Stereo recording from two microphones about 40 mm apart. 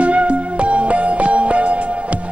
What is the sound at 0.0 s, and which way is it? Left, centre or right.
Music, right.